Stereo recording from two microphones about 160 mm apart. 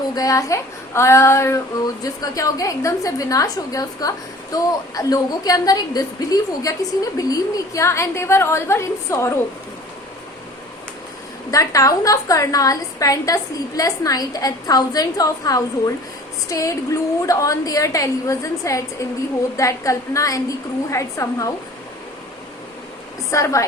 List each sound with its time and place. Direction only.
0.1 s a woman's voice: 20° left (ahead or behind)
11.5 s a woman's voice: 20° left (ahead or behind)
23.3 s a woman's voice: 20° left (ahead or behind)